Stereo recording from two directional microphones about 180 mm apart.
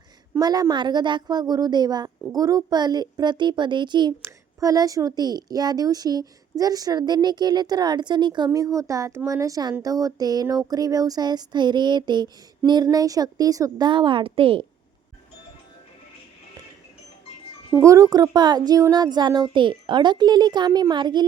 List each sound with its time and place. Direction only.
0.3 s a woman's voice: 20° right (ahead or behind)
17.7 s a woman's voice: 15° right (ahead or behind)